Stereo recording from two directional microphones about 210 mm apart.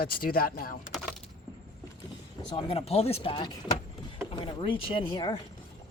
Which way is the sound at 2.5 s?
25° left (ahead or behind).